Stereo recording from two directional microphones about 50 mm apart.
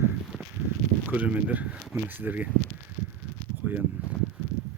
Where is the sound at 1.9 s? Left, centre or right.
Right.